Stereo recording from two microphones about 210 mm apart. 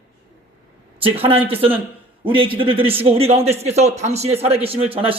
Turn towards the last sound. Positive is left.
turn(degrees=-25)  # may be behind; listen again after turning